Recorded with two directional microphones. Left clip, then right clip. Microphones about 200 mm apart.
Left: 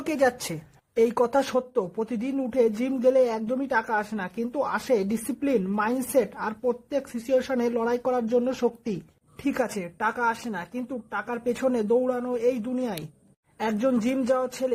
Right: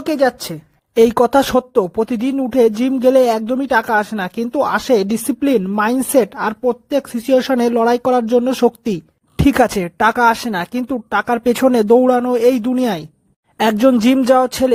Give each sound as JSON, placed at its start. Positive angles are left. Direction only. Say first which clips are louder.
{"t": 0.0, "sound": "a woman's voice", "louder": "right 8 dB", "side_deg": -30}